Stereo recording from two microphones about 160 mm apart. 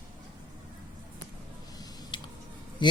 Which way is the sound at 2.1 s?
30° left (ahead or behind).